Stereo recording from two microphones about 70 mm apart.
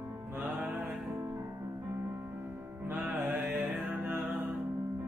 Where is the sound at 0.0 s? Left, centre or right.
Right.